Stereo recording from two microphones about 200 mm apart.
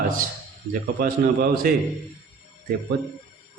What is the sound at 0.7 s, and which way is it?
A man's voice, 45° right (ahead or behind).